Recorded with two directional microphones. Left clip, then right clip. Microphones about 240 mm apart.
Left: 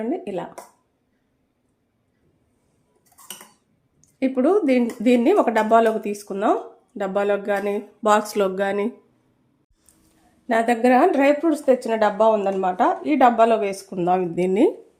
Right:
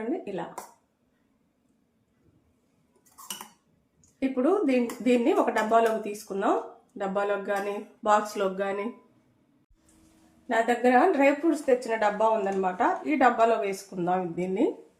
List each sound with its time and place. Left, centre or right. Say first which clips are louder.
4.2 s speech: left 6 dB; left
10.5 s speech: left 5 dB; left